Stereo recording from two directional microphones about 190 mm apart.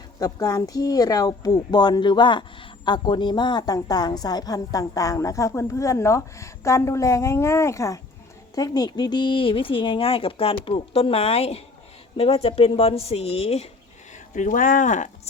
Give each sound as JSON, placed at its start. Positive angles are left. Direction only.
{"t": 0.2, "sound": "a woman's voice", "side_deg": 20}
{"t": 14.3, "sound": "a woman's voice", "side_deg": 45}